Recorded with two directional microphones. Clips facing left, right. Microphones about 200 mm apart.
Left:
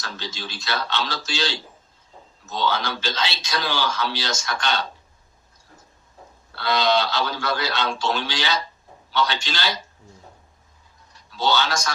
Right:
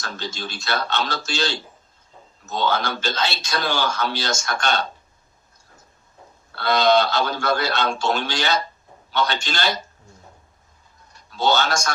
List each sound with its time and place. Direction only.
0.0 s a man's voice: 50° right (ahead or behind)
6.5 s a man's voice: 50° right (ahead or behind)
11.1 s a man's voice: 50° right (ahead or behind)